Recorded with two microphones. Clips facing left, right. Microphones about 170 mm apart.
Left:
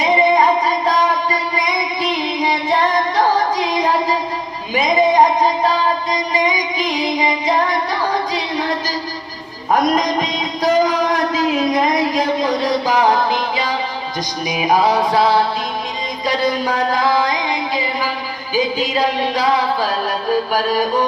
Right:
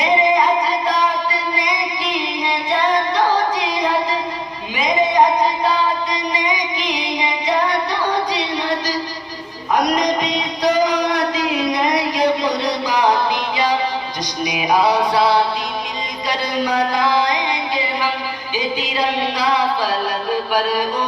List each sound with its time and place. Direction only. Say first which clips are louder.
1.6 s child singing: left 2 dB; 45° left (ahead or behind)
6.8 s music: left 6 dB; 45° left (ahead or behind)
10.6 s music: left 2 dB; 45° left (ahead or behind)
18.5 s music: left 5 dB; 45° left (ahead or behind)
20.5 s music: left 2 dB; 40° left (ahead or behind)